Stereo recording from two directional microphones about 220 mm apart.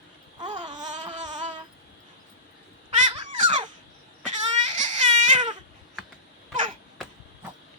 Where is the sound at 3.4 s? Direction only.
35° right (ahead or behind).